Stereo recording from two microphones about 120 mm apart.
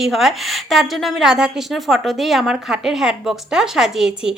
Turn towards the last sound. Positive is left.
turn(degrees=-5)  # may be behind; listen again after turning